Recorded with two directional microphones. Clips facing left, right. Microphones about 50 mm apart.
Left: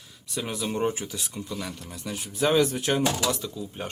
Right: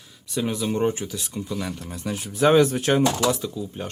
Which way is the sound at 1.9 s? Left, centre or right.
Right.